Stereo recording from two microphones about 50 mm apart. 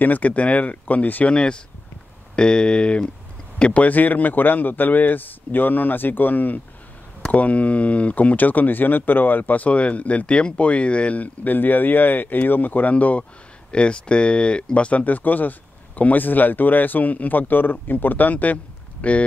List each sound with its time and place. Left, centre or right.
0.0 s speech: left
1.3 s speech: centre